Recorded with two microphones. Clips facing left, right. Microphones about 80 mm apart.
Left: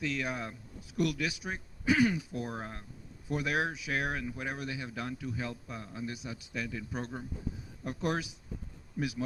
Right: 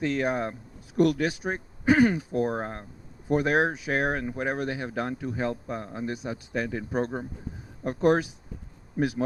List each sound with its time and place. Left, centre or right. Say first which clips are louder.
0.0 s speech: right 8 dB; right